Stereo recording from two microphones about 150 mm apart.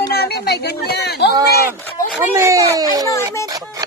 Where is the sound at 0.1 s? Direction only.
90° left.